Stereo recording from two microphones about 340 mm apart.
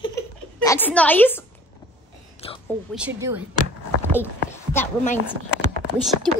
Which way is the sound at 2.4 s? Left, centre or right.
Centre.